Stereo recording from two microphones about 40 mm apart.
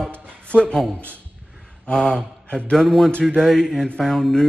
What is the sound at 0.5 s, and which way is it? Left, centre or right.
Speech, left.